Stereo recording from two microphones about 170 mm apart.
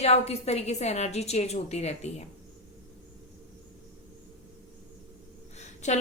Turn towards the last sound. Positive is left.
turn(degrees=45)  # may be behind; listen again after turning